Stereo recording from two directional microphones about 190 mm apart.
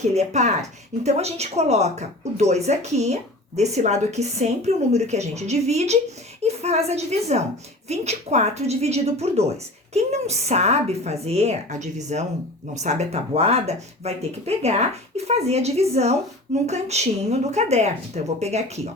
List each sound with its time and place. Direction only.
0.1 s a woman's voice: 35° right (ahead or behind)